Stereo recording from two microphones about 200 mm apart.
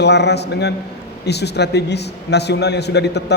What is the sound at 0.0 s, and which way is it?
A man's voice, 60° left (ahead or behind).